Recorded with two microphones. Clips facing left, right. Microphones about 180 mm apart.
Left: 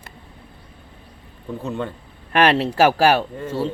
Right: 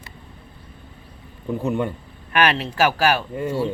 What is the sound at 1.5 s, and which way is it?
Speech, 15° right (ahead or behind).